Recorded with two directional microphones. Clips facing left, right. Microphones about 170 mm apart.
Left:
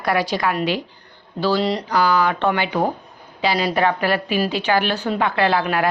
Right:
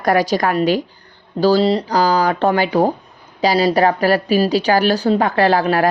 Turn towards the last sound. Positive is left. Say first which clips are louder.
# right 4 dB
turn(degrees=-40)  # may be behind; listen again after turning